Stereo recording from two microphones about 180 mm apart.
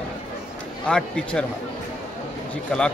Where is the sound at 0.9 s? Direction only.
5° left (ahead or behind).